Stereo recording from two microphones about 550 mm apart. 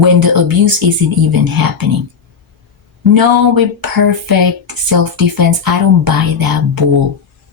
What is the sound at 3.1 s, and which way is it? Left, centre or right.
Speech, right.